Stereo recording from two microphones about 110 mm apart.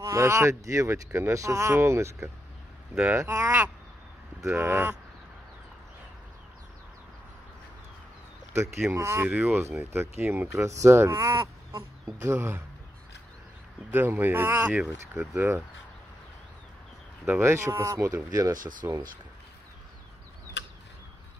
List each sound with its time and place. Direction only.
0.0 s speech: 25° right (ahead or behind)
8.9 s speech: 25° right (ahead or behind)
9.3 s speech: 10° right (ahead or behind)
9.6 s speech: 25° right (ahead or behind)
12.2 s speech: 20° right (ahead or behind)
13.8 s speech: 20° right (ahead or behind)
17.3 s speech: 25° right (ahead or behind)